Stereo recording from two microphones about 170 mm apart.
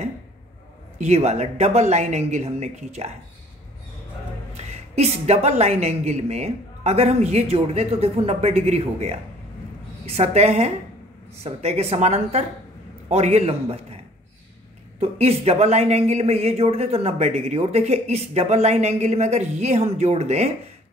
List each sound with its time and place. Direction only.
0.9 s speech: 40° right (ahead or behind)
4.6 s speech: 40° right (ahead or behind)
15.0 s speech: 35° right (ahead or behind)